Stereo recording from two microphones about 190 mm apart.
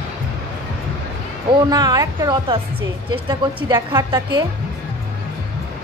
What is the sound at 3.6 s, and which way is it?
Speech, 20° right (ahead or behind).